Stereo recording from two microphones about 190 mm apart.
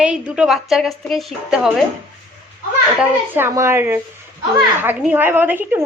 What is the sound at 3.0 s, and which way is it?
A woman's voice, 10° right (ahead or behind).